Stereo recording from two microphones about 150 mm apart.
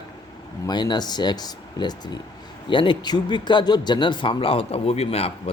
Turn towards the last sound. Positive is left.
turn(degrees=40)  # may be behind; listen again after turning